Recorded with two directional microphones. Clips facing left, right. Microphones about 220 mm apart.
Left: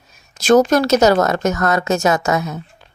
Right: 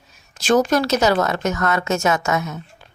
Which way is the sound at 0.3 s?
40° left (ahead or behind).